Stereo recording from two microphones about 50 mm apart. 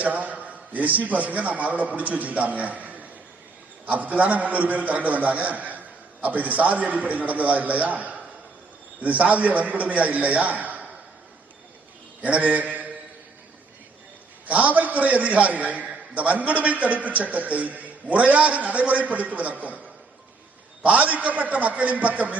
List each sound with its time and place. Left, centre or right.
0.0 s a man's voice: right
12.2 s mantra: right
14.4 s a man's voice: right
20.8 s a man's voice: right